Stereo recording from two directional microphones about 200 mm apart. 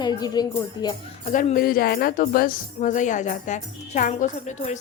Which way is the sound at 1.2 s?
35° left (ahead or behind).